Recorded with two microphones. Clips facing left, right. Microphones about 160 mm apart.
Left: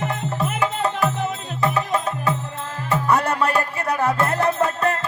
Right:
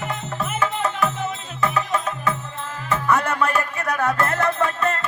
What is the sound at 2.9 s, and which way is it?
Music, 10° left (ahead or behind).